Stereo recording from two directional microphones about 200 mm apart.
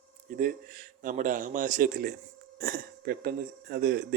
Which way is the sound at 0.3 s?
45° right (ahead or behind).